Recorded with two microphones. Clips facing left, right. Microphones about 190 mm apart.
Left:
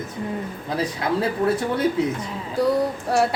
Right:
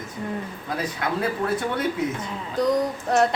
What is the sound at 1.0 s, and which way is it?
Speech, 30° left (ahead or behind).